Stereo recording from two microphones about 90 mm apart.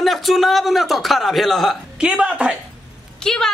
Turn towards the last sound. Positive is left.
turn(degrees=5)  # may be behind; listen again after turning